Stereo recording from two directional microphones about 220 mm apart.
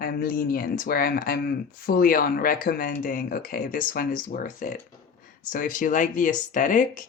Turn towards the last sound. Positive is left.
turn(degrees=35)  # may be behind; listen again after turning